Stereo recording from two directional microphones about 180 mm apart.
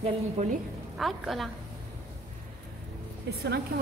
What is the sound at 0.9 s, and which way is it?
Speech, centre (ahead or behind).